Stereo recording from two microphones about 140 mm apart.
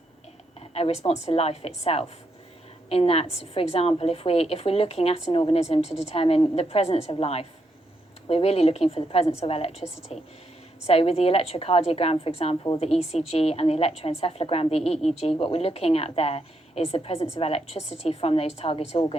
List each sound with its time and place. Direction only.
0.6 s a woman's voice: 45° left (ahead or behind)